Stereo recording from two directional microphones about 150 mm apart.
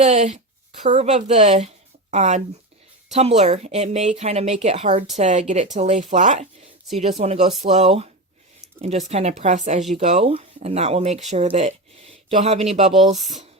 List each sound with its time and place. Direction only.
0.0 s a woman's voice: 45° right (ahead or behind)